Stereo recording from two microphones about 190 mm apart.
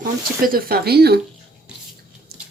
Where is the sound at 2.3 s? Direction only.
55° right (ahead or behind).